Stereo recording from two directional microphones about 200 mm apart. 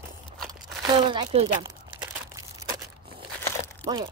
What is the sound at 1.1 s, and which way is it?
Speech, 30° right (ahead or behind).